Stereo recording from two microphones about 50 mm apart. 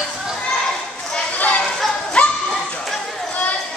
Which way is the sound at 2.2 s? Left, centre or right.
Left.